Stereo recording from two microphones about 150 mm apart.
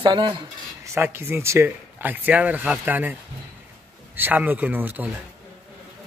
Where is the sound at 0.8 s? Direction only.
15° right (ahead or behind).